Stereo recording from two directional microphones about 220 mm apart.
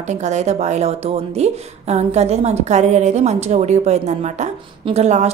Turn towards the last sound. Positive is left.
turn(degrees=-30)  # may be behind; listen again after turning